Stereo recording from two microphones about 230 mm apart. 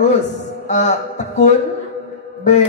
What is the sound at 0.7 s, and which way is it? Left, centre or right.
Speech, left.